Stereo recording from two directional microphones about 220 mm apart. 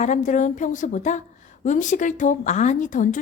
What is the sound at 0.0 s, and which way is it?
A woman's voice, 35° left (ahead or behind).